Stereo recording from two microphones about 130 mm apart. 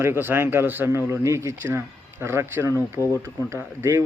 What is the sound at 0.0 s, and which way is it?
Speech, 15° right (ahead or behind).